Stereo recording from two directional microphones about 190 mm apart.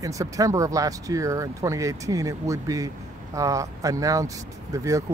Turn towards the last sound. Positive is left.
turn(degrees=-15)  # may be behind; listen again after turning